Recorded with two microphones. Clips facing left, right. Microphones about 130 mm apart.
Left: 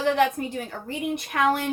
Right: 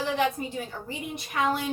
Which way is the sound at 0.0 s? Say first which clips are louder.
Left 5 dB; 60° left (ahead or behind).